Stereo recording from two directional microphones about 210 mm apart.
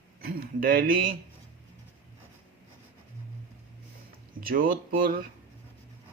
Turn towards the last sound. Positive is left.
turn(degrees=-45)  # may be behind; listen again after turning